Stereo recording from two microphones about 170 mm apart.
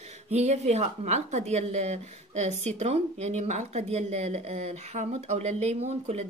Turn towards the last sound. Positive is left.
turn(degrees=-40)  # may be behind; listen again after turning